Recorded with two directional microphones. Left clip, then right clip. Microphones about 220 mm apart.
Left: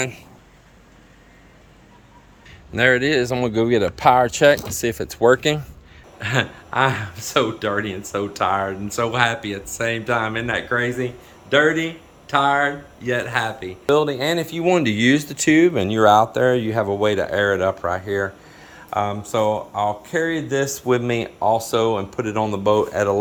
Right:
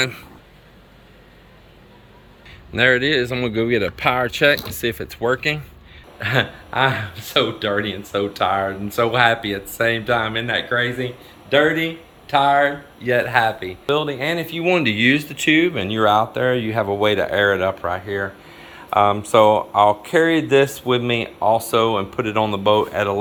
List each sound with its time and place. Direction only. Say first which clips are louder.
0.0 s speech: right 5 dB; 90° left
2.7 s a man's voice: right 1 dB; 20° left (ahead or behind)
4.9 s speech: left 9 dB; 30° left (ahead or behind)
6.1 s a man's voice: right 2 dB; 10° left (ahead or behind)
13.9 s a man's voice: left 2 dB; 25° left (ahead or behind)
18.9 s speech: right 7 dB; 5° left (ahead or behind)
20.8 s a man's voice: right 1 dB; 10° left (ahead or behind)